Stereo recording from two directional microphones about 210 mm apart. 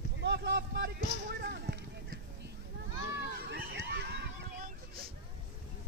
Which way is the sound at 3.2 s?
50° right (ahead or behind).